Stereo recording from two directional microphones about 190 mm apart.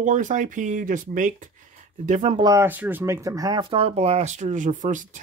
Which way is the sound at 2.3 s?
20° right (ahead or behind).